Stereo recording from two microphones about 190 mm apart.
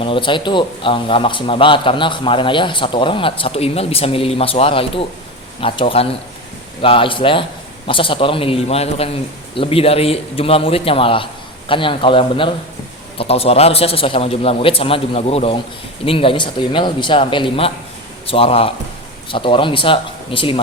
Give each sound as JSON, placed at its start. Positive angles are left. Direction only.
{"t": 0.0, "sound": "a man's voice", "side_deg": 25}